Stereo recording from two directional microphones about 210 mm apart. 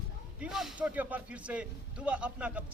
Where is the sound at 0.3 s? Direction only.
5° right (ahead or behind).